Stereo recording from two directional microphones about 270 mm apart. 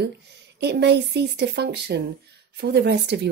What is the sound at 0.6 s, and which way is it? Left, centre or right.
Speech, right.